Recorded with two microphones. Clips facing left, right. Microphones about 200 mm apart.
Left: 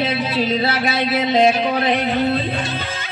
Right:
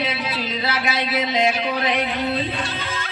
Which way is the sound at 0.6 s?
30° left (ahead or behind).